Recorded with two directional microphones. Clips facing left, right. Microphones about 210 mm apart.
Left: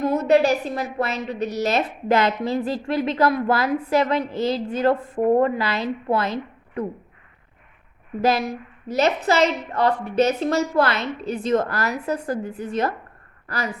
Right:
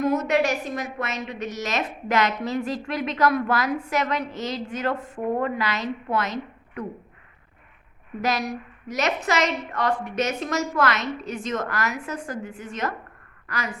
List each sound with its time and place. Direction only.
0.0 s a woman's voice: 30° left (ahead or behind)
8.2 s a woman's voice: 30° left (ahead or behind)